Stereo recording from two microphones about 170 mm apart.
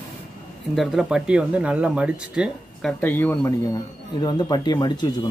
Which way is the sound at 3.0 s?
10° left (ahead or behind).